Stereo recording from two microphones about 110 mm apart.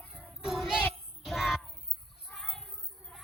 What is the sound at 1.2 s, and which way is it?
Music, centre (ahead or behind).